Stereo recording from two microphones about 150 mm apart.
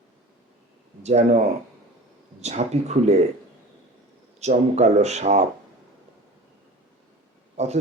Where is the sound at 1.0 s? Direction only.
45° right (ahead or behind).